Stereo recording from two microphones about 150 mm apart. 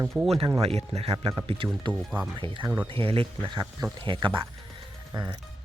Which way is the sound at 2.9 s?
40° right (ahead or behind).